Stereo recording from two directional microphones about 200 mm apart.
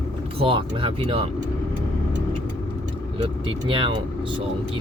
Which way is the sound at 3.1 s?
25° right (ahead or behind).